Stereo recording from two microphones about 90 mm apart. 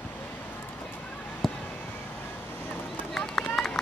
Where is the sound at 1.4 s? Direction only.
Centre (ahead or behind).